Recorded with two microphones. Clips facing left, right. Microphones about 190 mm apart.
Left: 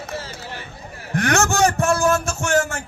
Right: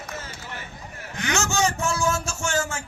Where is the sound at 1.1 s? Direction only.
60° left (ahead or behind).